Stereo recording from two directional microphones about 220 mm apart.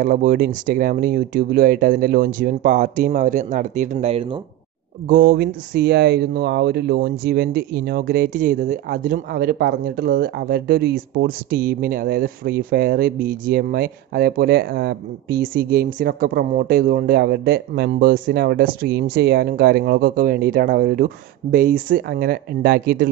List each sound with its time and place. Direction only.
0.0 s speech: 40° right (ahead or behind)
5.0 s speech: 40° right (ahead or behind)